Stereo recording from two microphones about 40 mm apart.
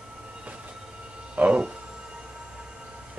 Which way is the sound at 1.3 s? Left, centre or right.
Right.